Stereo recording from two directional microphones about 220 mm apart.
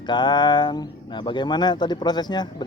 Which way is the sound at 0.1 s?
20° left (ahead or behind).